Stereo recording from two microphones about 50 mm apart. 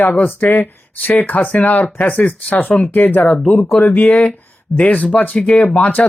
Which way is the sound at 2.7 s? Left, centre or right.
Left.